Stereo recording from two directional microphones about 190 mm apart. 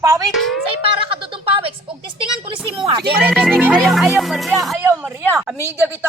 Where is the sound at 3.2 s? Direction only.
5° right (ahead or behind).